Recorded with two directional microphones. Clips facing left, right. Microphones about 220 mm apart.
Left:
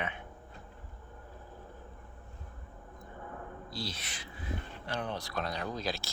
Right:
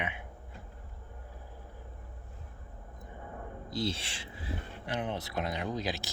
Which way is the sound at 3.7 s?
25° right (ahead or behind).